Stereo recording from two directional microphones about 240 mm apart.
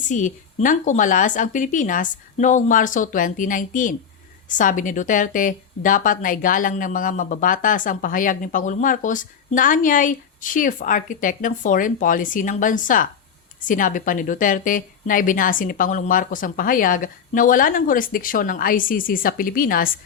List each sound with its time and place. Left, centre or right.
0.1 s a woman's voice: left